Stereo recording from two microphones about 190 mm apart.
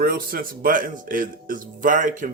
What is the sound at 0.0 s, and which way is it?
Speech, 50° right (ahead or behind).